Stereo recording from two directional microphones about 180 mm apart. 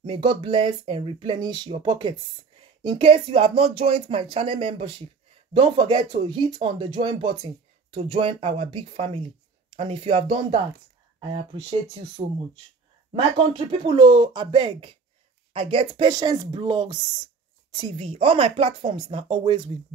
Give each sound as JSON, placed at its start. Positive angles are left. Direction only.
{"t": 0.0, "sound": "speech", "side_deg": -30}
{"t": 12.2, "sound": "speech", "side_deg": -40}
{"t": 13.1, "sound": "speech", "side_deg": -25}